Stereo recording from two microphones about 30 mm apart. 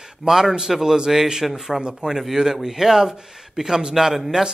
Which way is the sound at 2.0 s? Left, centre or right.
Right.